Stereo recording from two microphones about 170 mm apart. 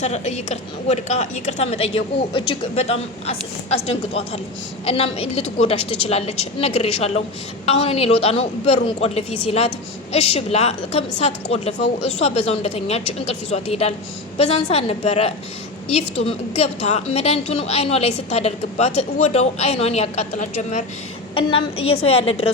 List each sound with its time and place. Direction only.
0.0 s a woman's voice: 40° left (ahead or behind)
21.3 s a woman's voice: 35° left (ahead or behind)